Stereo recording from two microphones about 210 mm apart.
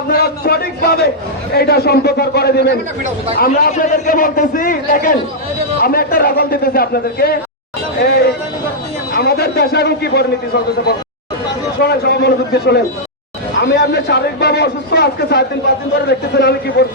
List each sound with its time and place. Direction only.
0.1 s a sound: 45° left (ahead or behind)
1.5 s a man's voice: 50° left (ahead or behind)
11.8 s a man's voice: 50° left (ahead or behind)